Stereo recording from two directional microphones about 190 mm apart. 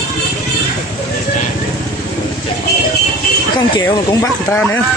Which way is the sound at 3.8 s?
15° left (ahead or behind).